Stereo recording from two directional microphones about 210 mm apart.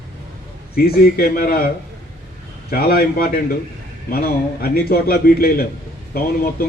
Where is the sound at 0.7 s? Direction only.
45° left (ahead or behind).